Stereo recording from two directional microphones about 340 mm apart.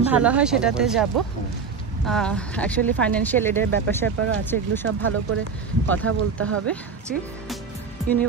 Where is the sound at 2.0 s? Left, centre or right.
Centre.